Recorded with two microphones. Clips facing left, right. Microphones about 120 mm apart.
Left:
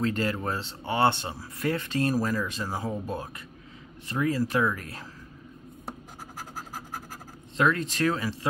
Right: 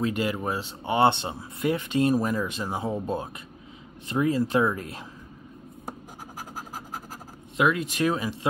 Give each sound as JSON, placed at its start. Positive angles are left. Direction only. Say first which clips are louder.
{"t": 0.0, "sound": "speech", "louder": "right 1 dB", "side_deg": -15}
{"t": 7.5, "sound": "speech", "louder": "right 1 dB", "side_deg": -10}